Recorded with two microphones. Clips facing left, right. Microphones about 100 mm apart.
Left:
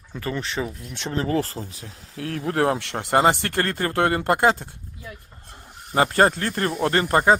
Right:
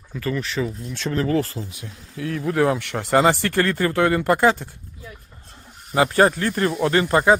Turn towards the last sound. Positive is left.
turn(degrees=45)  # may be behind; listen again after turning